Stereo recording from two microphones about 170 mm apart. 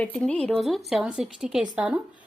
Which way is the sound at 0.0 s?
10° left (ahead or behind).